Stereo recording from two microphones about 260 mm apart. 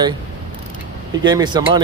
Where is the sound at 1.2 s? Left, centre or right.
Centre.